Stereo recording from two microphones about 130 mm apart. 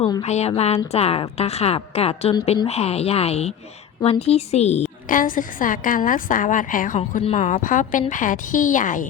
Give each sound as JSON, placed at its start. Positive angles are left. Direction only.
{"t": 0.2, "sound": "a woman's voice", "side_deg": 55}
{"t": 5.0, "sound": "a woman's voice", "side_deg": 90}
{"t": 7.3, "sound": "a woman's voice", "side_deg": 60}